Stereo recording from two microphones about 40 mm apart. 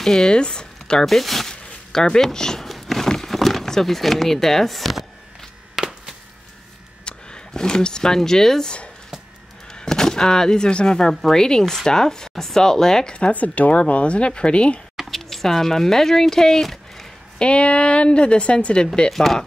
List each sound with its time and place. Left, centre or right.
0.0 s speech: centre
1.0 s speech: centre
1.5 s zipper: centre
2.3 s speech: centre
2.7 s a sound: centre
3.3 s speech: centre
5.8 s chop: centre
7.1 s speech: centre
13.1 s speech: left
15.0 s speech: centre
17.4 s speech: left
19.0 s speech: centre